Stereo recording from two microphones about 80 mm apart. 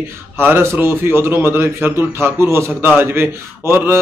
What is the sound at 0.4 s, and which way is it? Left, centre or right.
A man's voice, right.